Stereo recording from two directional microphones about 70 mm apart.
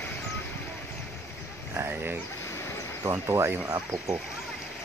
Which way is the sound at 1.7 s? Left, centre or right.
Right.